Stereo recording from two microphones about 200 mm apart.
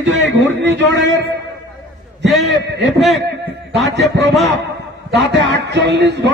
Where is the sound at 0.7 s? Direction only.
60° right (ahead or behind).